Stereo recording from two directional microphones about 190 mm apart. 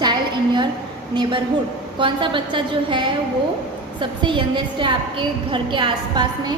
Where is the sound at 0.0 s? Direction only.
25° right (ahead or behind).